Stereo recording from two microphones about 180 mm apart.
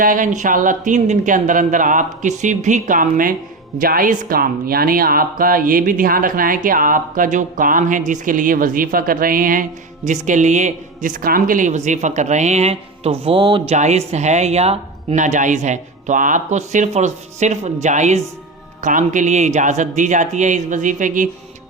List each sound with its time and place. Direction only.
0.0 s speech: 45° right (ahead or behind); by 13.7 s 30° right (ahead or behind)
13.7 s speech: 40° right (ahead or behind)